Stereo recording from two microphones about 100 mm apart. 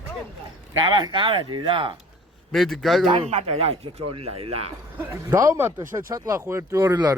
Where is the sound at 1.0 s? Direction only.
55° right (ahead or behind).